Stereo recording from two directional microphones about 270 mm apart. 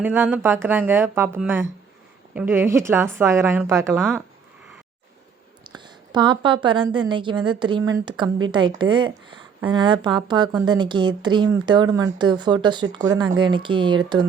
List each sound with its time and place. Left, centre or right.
0.0 s a woman's voice: centre
5.6 s a woman's voice: centre